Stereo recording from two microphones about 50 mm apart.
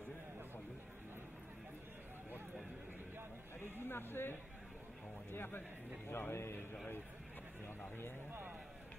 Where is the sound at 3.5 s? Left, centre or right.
Left.